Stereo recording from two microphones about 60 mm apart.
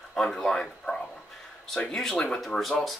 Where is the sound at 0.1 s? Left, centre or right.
Centre.